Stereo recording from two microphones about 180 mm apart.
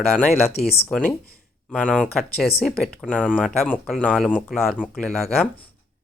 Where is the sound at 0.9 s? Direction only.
5° left (ahead or behind).